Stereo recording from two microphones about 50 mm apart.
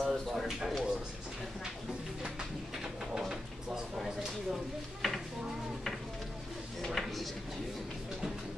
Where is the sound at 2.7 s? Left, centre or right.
Centre.